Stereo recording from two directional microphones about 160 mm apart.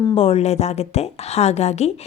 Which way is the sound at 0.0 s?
35° left (ahead or behind).